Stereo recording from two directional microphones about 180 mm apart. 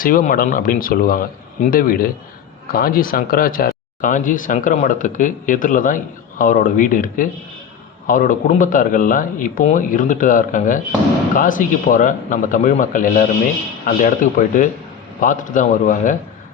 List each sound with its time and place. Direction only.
0.0 s speech: 50° left (ahead or behind)